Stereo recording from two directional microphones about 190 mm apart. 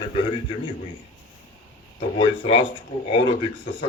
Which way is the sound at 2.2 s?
25° left (ahead or behind).